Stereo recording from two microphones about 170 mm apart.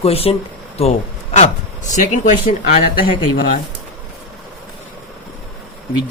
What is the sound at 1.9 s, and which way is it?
Speech, 50° left (ahead or behind).